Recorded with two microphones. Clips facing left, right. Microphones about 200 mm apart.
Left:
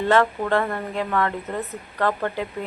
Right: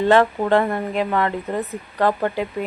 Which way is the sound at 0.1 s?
20° right (ahead or behind).